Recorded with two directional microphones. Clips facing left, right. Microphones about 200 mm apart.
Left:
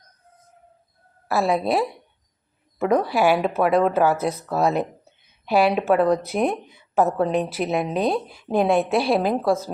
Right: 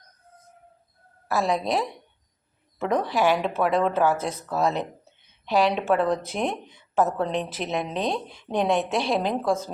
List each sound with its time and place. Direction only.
1.3 s a woman's voice: 10° left (ahead or behind)